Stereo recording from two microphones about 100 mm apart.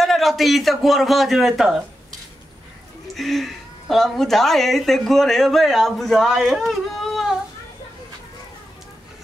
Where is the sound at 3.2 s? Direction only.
Centre (ahead or behind).